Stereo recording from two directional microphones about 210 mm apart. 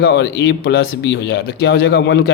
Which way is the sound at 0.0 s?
55° left (ahead or behind).